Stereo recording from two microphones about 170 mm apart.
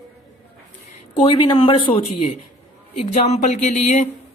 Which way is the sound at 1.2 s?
30° left (ahead or behind).